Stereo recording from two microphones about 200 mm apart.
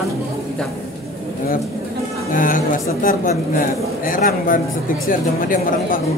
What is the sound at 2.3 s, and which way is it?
A woman's voice, 40° left (ahead or behind).